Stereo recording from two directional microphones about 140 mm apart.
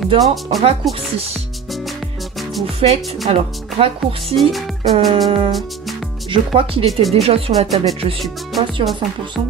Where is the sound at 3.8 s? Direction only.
40° right (ahead or behind).